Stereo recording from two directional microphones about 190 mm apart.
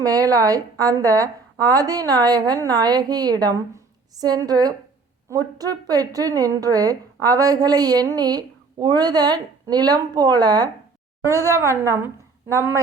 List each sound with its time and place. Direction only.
0.0 s a woman's voice: 20° right (ahead or behind)